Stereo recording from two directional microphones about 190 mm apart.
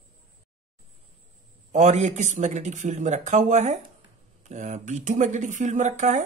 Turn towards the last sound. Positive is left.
turn(degrees=-40)  # may be behind; listen again after turning